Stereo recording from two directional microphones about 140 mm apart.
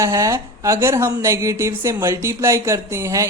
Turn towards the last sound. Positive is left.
turn(degrees=-20)  # may be behind; listen again after turning